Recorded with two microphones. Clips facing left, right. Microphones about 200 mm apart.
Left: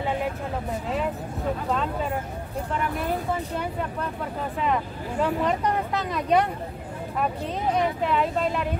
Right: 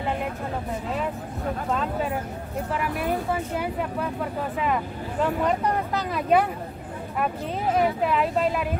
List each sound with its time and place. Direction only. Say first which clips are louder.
5.2 s speech: right 1 dB; centre (ahead or behind)
7.7 s speech: right 2 dB; 5° right (ahead or behind)